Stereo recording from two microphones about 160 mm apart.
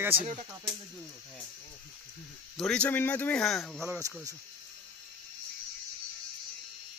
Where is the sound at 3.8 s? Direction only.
15° right (ahead or behind).